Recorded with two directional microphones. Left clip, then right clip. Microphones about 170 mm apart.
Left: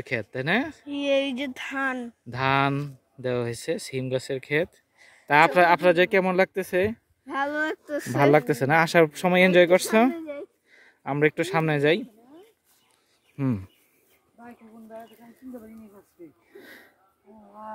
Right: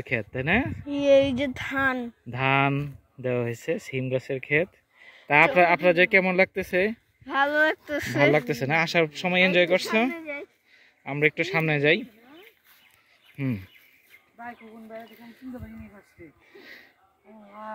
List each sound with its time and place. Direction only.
0.0 s speech: 5° left (ahead or behind)
0.8 s a sound: 50° right (ahead or behind)
1.5 s speech: 25° right (ahead or behind)
2.2 s speech: 5° left (ahead or behind)
7.2 s speech: centre (ahead or behind)
7.7 s speech: 20° right (ahead or behind)
8.2 s speech: 30° left (ahead or behind)
10.1 s a sound: 50° left (ahead or behind)
11.1 s a man's voice: 30° left (ahead or behind)
11.6 s a man's voice: 20° left (ahead or behind)
16.5 s sniff: 25° left (ahead or behind)